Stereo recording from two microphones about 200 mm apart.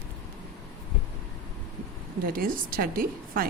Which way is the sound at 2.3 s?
45° right (ahead or behind).